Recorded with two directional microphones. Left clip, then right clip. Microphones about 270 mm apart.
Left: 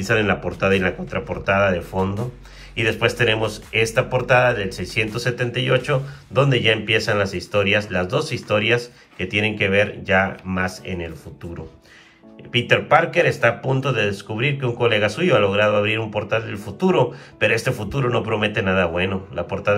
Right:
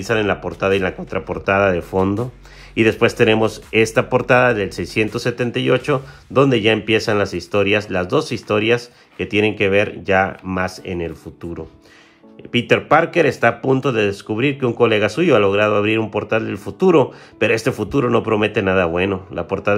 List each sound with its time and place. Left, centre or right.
0.0 s speech: centre
12.5 s speech: right